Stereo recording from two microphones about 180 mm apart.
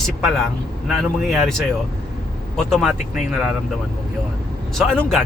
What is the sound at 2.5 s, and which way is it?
Speech, centre (ahead or behind).